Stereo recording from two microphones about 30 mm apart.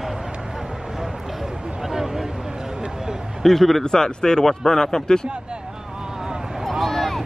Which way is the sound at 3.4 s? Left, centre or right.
Centre.